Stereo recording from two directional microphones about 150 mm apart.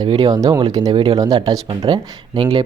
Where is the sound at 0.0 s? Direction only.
30° right (ahead or behind).